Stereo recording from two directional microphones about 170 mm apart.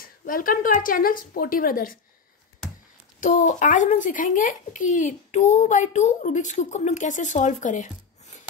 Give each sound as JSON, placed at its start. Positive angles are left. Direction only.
{"t": 0.0, "sound": "speech", "side_deg": 55}
{"t": 3.2, "sound": "a child's voice", "side_deg": 50}